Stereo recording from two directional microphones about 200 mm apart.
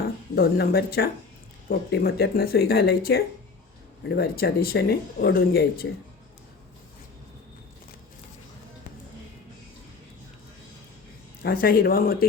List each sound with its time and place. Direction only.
0.3 s speech: 50° left (ahead or behind)
11.4 s speech: 50° left (ahead or behind)